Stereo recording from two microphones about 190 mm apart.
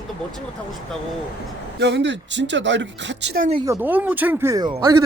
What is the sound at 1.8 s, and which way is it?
Speech, 70° right (ahead or behind).